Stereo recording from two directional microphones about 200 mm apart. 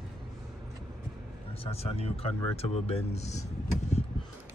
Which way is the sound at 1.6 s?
30° left (ahead or behind).